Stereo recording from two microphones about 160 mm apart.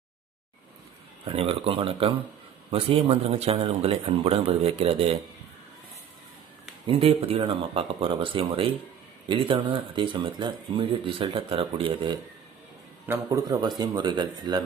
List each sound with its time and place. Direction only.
1.2 s speech: 35° right (ahead or behind)
6.8 s speech: 35° right (ahead or behind)
13.1 s speech: 20° right (ahead or behind)